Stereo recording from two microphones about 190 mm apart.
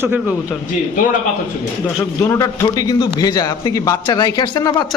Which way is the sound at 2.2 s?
15° left (ahead or behind).